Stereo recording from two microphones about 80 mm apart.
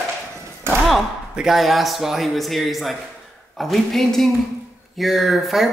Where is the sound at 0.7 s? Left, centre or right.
Right.